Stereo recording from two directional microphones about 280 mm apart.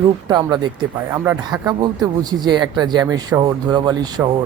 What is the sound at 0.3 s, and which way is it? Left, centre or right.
Speech, centre.